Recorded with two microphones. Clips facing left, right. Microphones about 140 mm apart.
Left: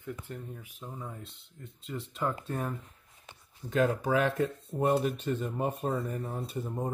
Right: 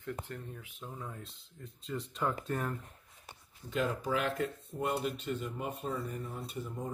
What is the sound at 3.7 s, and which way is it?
Speech, 45° left (ahead or behind).